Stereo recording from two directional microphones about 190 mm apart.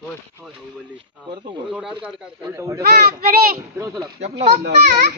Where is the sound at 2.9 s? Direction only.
55° right (ahead or behind).